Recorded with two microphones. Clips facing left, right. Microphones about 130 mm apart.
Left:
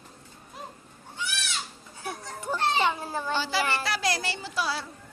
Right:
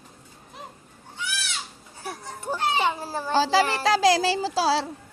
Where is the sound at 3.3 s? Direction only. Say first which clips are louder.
Right 9 dB; 90° right.